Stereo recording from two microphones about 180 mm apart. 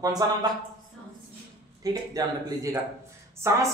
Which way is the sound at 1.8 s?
20° right (ahead or behind).